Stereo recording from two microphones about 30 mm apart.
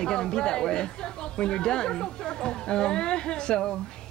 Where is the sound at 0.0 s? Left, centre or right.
Left.